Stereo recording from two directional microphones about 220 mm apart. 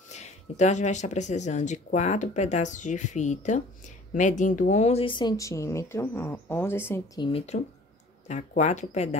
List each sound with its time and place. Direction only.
0.1 s speech: 30° left (ahead or behind); by 7.2 s 10° left (ahead or behind)
7.2 s speech: 30° left (ahead or behind)